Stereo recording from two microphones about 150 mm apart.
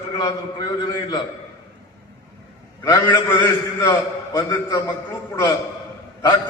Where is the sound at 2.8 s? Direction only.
25° left (ahead or behind).